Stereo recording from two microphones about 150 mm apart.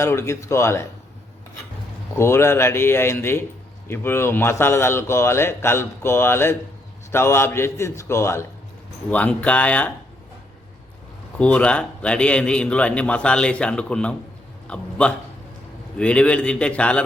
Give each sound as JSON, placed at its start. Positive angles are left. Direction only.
{"t": 0.0, "sound": "speech", "side_deg": 20}
{"t": 2.1, "sound": "a man's voice", "side_deg": 15}
{"t": 11.3, "sound": "a man's voice", "side_deg": 10}